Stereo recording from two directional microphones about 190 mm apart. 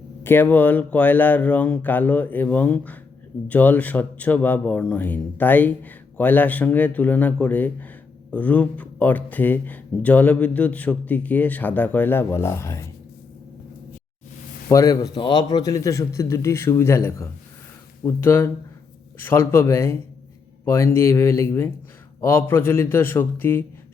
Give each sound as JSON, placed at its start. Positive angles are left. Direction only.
{"t": 0.2, "sound": "speech", "side_deg": 10}
{"t": 14.7, "sound": "speech", "side_deg": 15}